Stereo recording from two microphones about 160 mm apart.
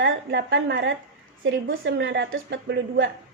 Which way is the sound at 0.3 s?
90° right.